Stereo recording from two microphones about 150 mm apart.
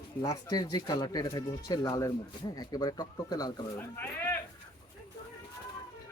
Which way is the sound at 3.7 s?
15° left (ahead or behind).